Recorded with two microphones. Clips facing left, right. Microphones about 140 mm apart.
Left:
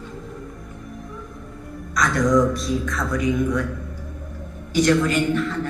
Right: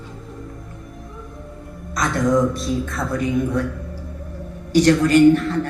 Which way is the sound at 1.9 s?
25° right (ahead or behind).